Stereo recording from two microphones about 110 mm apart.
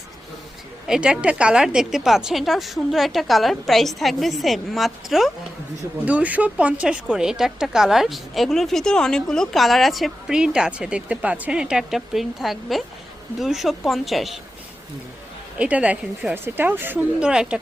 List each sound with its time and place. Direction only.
0.9 s a woman's voice: 5° right (ahead or behind)
6.1 s a woman's voice: 15° right (ahead or behind)
15.5 s a woman's voice: 10° right (ahead or behind)